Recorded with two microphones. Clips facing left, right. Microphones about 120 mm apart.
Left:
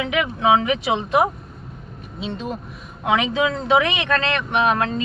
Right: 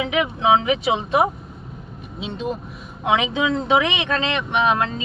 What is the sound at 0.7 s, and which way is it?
Speech, centre (ahead or behind).